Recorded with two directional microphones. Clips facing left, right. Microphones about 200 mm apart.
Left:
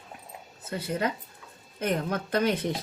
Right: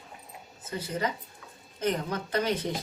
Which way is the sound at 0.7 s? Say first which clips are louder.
Left 2 dB; 60° left (ahead or behind).